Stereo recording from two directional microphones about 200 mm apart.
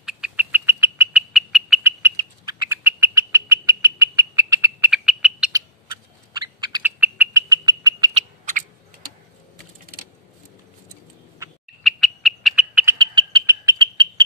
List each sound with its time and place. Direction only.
0.0 s bird: 5° right (ahead or behind)
1.8 s bird: 10° right (ahead or behind)
5.5 s bird: 20° right (ahead or behind)
6.8 s bird: 10° right (ahead or behind)
7.4 s frog: 20° right (ahead or behind)
8.1 s owl: 40° right (ahead or behind)
11.8 s frog: centre (ahead or behind)
12.9 s frog: 20° right (ahead or behind)